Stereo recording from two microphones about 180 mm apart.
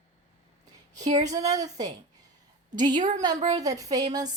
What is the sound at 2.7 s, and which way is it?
Speech, 25° right (ahead or behind).